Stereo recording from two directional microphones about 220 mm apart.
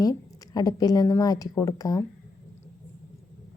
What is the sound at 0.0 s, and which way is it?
A woman's voice, 15° left (ahead or behind).